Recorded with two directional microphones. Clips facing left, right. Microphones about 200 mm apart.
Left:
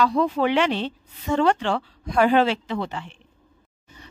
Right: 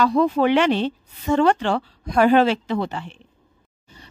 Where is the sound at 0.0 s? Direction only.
45° right (ahead or behind).